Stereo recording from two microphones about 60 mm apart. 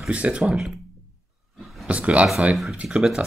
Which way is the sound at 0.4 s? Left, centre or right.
Centre.